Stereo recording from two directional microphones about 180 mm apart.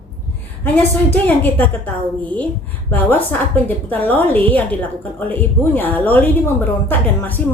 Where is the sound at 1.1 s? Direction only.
10° left (ahead or behind).